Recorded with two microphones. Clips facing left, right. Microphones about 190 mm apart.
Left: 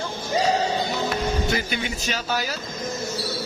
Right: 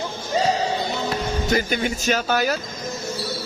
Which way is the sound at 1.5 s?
45° right (ahead or behind).